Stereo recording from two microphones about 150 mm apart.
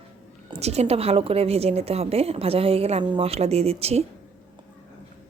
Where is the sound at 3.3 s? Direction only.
45° right (ahead or behind).